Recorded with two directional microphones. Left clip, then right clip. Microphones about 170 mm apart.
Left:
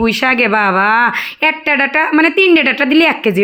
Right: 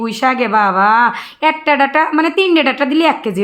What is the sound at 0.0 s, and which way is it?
A woman's voice, 25° left (ahead or behind).